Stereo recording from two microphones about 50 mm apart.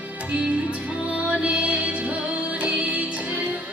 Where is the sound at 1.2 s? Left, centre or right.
Right.